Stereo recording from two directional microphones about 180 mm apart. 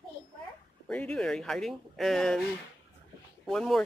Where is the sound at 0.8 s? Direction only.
5° left (ahead or behind).